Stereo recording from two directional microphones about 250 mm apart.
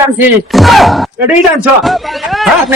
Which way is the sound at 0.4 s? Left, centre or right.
Centre.